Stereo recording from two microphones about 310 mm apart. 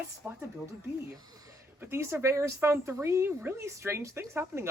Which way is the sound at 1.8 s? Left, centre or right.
Centre.